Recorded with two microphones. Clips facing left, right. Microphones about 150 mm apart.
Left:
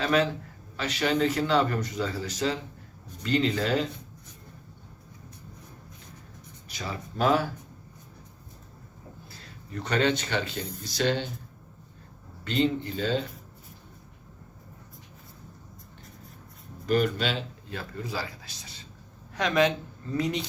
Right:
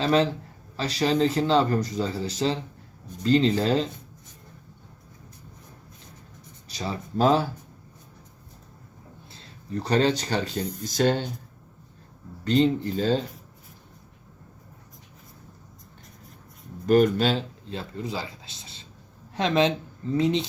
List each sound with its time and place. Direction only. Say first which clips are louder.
0.0 s speech: right 3 dB; 30° right (ahead or behind)
6.7 s speech: right 4 dB; 30° right (ahead or behind)
9.3 s speech: right 7 dB; 35° right (ahead or behind)
12.5 s speech: right 5 dB; 40° right (ahead or behind)
16.8 s speech: right 6 dB; 45° right (ahead or behind)
17.7 s speech: right 2 dB; 20° right (ahead or behind)